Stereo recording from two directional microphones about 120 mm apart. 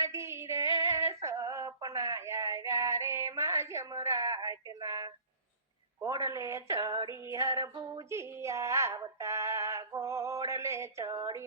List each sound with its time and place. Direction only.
0.0 s female singing: 25° right (ahead or behind)
6.0 s music: 30° right (ahead or behind)